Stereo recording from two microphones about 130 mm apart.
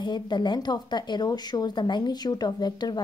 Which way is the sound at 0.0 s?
35° left (ahead or behind).